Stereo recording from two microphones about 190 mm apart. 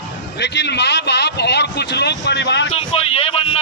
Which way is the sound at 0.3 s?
65° left (ahead or behind).